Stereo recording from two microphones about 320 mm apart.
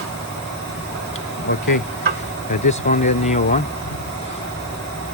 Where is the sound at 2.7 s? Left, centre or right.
Left.